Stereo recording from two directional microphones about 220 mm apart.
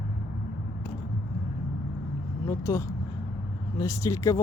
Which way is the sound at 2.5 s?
15° left (ahead or behind).